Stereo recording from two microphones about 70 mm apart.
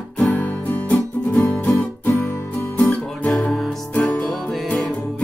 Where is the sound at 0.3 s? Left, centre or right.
Left.